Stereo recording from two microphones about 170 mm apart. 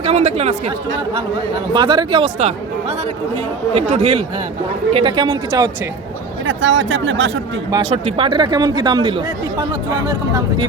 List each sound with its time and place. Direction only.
0.0 s speech: 40° right (ahead or behind)
1.7 s speech: 30° right (ahead or behind)
3.8 s speech: 40° right (ahead or behind)
6.4 s speech: 90° right
7.9 s speech: 35° right (ahead or behind)